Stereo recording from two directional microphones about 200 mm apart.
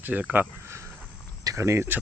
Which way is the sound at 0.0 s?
5° right (ahead or behind).